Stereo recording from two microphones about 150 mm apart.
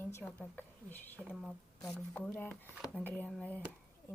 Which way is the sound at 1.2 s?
Centre (ahead or behind).